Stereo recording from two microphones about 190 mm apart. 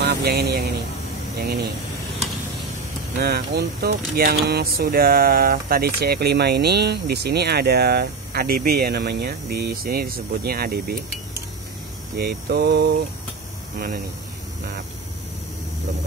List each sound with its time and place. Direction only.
0.0 s speech: 60° right (ahead or behind)
3.2 s speech: 55° right (ahead or behind)
13.7 s speech: 50° right (ahead or behind)